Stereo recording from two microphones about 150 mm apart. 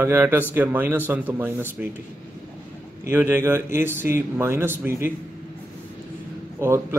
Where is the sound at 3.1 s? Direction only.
15° right (ahead or behind).